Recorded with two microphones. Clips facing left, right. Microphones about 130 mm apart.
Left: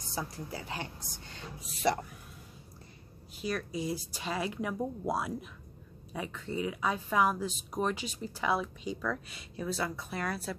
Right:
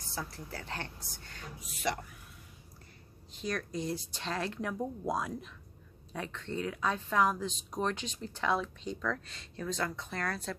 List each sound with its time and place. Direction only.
0.1 s speech: 15° left (ahead or behind); by 2.0 s 35° left (ahead or behind)
3.3 s speech: 5° left (ahead or behind)